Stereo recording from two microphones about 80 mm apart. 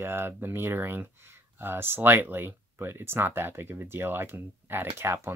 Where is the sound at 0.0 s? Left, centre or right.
Right.